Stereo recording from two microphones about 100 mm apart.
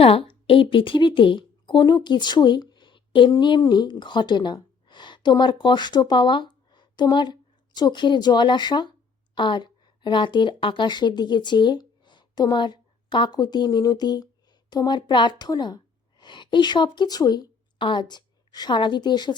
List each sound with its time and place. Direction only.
0.0 s a woman's voice: 70° left (ahead or behind); by 19.3 s 45° left (ahead or behind)